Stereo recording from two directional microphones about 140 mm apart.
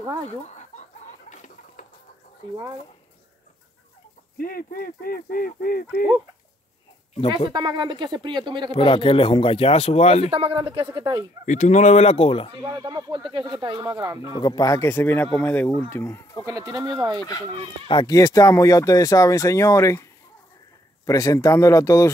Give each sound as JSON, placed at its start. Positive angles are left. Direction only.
{"t": 1.3, "sound": "chicken", "side_deg": 60}
{"t": 4.4, "sound": "speech", "side_deg": 90}
{"t": 7.5, "sound": "speech", "side_deg": -30}
{"t": 8.7, "sound": "speech", "side_deg": 40}
{"t": 10.3, "sound": "speech", "side_deg": -40}
{"t": 11.4, "sound": "speech", "side_deg": 60}
{"t": 12.6, "sound": "speech", "side_deg": -30}
{"t": 14.4, "sound": "speech", "side_deg": 25}
{"t": 16.4, "sound": "speech", "side_deg": -25}
{"t": 17.8, "sound": "speech", "side_deg": 30}